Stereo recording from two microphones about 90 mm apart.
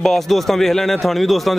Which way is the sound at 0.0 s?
Centre (ahead or behind).